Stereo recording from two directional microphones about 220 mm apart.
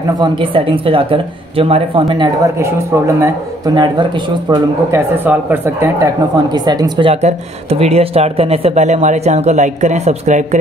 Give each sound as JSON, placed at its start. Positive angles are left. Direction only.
{"t": 0.2, "sound": "speech", "side_deg": -25}